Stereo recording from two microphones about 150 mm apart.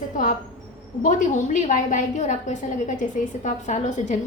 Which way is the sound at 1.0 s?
55° left (ahead or behind).